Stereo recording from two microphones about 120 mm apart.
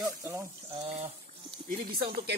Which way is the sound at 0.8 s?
60° right (ahead or behind).